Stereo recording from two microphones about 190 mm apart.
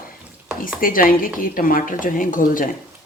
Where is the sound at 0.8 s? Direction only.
45° left (ahead or behind).